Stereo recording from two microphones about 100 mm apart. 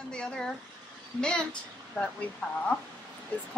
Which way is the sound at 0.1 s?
10° left (ahead or behind).